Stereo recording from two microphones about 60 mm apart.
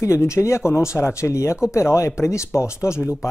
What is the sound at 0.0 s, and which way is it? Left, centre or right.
Speech, left.